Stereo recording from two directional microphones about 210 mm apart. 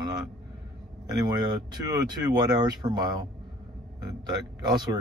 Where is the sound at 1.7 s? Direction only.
20° right (ahead or behind).